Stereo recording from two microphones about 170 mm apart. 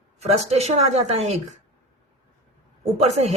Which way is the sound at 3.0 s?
40° right (ahead or behind).